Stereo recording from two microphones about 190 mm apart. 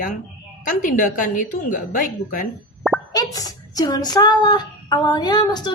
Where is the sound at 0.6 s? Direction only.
45° left (ahead or behind).